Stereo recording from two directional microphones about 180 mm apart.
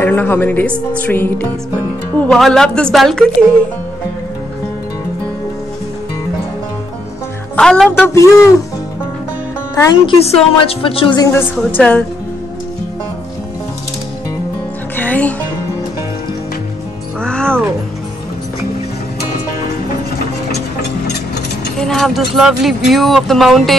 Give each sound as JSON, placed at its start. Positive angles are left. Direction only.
{"t": 0.0, "sound": "a woman's voice", "side_deg": 10}
{"t": 7.5, "sound": "speech", "side_deg": 5}
{"t": 8.1, "sound": "a woman's voice", "side_deg": 15}
{"t": 9.8, "sound": "a woman's voice", "side_deg": 30}
{"t": 11.5, "sound": "a woman's voice", "side_deg": 5}
{"t": 15.0, "sound": "music", "side_deg": 10}
{"t": 17.2, "sound": "music", "side_deg": 5}
{"t": 21.7, "sound": "speech", "side_deg": 0}